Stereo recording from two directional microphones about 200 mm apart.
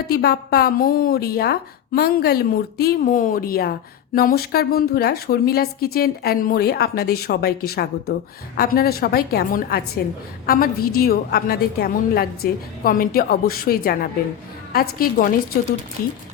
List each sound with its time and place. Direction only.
0.1 s a woman's voice: 55° left (ahead or behind)